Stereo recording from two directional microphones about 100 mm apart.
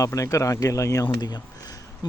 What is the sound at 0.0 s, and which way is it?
Speech, 30° left (ahead or behind).